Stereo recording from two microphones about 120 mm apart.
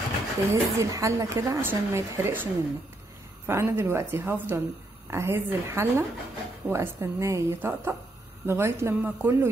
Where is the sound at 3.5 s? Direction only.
20° right (ahead or behind).